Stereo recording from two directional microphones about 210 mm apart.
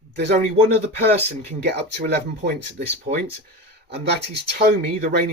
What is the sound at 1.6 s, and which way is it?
Speech, 50° right (ahead or behind).